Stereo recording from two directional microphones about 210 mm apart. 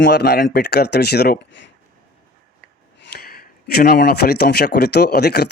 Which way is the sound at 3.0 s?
45° left (ahead or behind).